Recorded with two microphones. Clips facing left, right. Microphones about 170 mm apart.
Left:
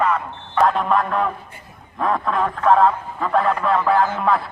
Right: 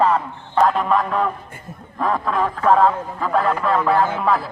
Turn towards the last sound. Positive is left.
turn(degrees=0)  # may be behind; listen again after turning